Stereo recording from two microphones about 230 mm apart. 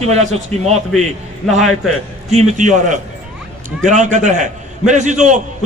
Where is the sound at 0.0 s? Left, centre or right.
Right.